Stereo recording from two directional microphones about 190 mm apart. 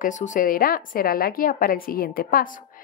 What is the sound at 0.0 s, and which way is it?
A woman's voice, 40° left (ahead or behind).